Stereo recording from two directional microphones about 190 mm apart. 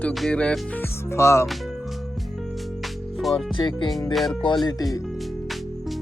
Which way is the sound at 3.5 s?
25° left (ahead or behind).